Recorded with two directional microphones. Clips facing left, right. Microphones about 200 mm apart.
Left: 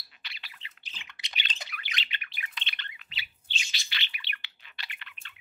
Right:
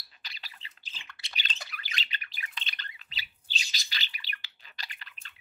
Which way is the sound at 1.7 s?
40° right (ahead or behind).